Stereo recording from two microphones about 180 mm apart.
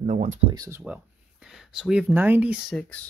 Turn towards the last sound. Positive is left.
turn(degrees=5)  # may be behind; listen again after turning